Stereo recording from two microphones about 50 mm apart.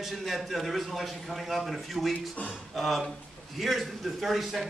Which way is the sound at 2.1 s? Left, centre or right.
Left.